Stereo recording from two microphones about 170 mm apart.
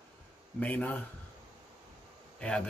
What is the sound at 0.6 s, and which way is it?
Speech, 10° left (ahead or behind).